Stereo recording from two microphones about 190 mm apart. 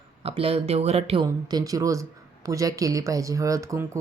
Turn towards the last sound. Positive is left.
turn(degrees=-15)  # may be behind; listen again after turning